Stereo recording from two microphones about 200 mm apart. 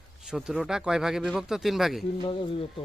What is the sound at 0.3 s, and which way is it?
Speech, 5° right (ahead or behind).